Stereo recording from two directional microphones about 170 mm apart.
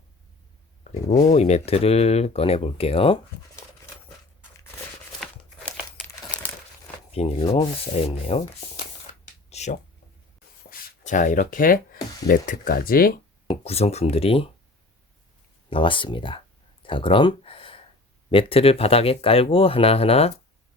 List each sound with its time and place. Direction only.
1.3 s speech: 40° left (ahead or behind)
7.1 s speech: 35° left (ahead or behind)
9.5 s a sound: 40° left (ahead or behind)
10.7 s writing: 50° left (ahead or behind)
12.3 s speech: 55° left (ahead or behind)
13.7 s speech: 40° left (ahead or behind)
15.7 s speech: 30° left (ahead or behind)
16.8 s a sound: 30° left (ahead or behind)
18.3 s speech: 30° left (ahead or behind)